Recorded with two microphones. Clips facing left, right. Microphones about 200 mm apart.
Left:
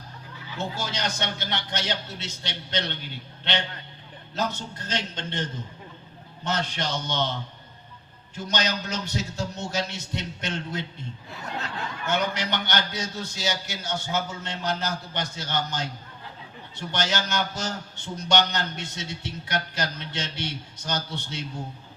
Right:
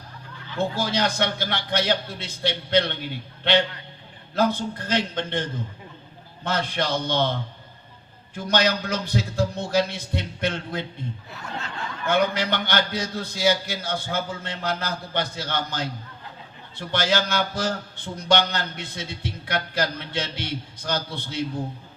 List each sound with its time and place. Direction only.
0.6 s a man's voice: 55° right (ahead or behind)
4.4 s a man's voice: 55° right (ahead or behind)
8.4 s a man's voice: 55° right (ahead or behind)
12.0 s a man's voice: 55° right (ahead or behind)